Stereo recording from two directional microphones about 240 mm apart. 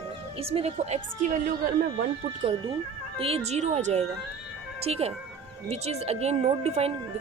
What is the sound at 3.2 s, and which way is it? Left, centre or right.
Speech, right.